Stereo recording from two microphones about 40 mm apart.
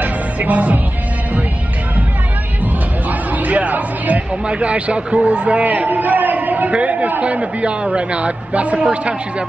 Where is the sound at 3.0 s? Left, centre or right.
Right.